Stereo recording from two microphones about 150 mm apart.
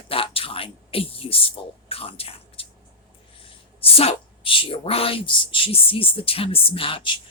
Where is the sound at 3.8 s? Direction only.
40° left (ahead or behind).